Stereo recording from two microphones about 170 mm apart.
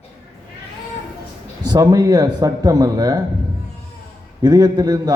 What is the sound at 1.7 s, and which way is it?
A man's voice, 20° right (ahead or behind).